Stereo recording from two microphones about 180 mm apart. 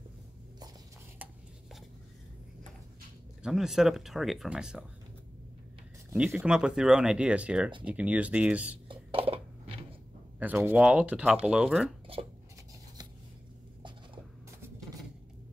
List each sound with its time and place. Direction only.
3.4 s speech: centre (ahead or behind)
6.1 s speech: 5° right (ahead or behind)
8.8 s a sound: 30° right (ahead or behind)
10.4 s speech: 10° right (ahead or behind)